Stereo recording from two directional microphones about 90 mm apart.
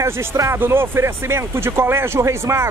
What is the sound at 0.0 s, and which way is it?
Speech, 30° right (ahead or behind).